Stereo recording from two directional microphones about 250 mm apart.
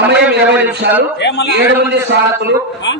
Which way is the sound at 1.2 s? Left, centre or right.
Left.